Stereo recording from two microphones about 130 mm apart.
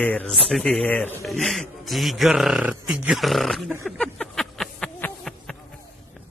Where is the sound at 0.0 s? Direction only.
10° left (ahead or behind).